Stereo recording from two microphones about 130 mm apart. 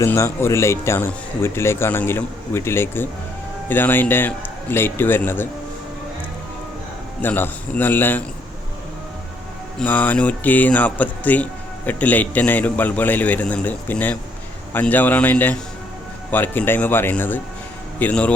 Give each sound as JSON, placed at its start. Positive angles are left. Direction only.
{"t": 0.0, "sound": "a man's voice", "side_deg": 20}
{"t": 7.2, "sound": "a man's voice", "side_deg": 15}
{"t": 9.7, "sound": "a man's voice", "side_deg": 10}